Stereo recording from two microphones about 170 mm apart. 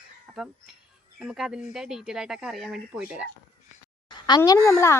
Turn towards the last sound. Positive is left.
turn(degrees=15)  # may be behind; listen again after turning